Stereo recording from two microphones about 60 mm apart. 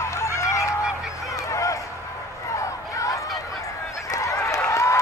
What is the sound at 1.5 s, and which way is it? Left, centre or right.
Run, left.